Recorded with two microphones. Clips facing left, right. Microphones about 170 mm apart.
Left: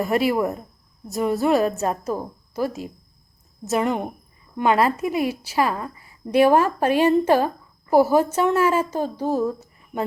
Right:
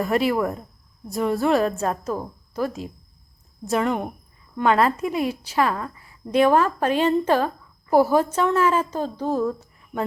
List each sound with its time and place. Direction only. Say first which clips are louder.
0.0 s a woman's voice: left 1 dB; 5° left (ahead or behind)
0.3 s speech: left 1 dB; 20° left (ahead or behind)
1.1 s a woman's voice: left 1 dB; 5° left (ahead or behind)
1.9 s a woman's voice: left 1 dB; 15° left (ahead or behind)
2.6 s a woman's voice: left 1 dB; 5° left (ahead or behind)
3.8 s a woman's voice: left 1 dB; 15° left (ahead or behind)